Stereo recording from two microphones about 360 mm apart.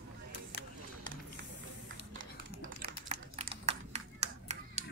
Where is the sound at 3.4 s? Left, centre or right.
Centre.